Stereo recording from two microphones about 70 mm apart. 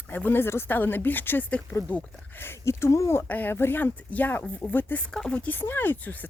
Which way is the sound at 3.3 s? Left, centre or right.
Left.